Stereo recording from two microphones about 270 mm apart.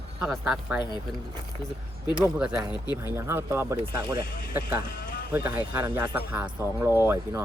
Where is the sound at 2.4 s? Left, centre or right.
Centre.